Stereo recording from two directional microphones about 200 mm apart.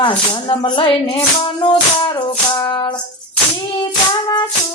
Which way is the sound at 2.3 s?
25° left (ahead or behind).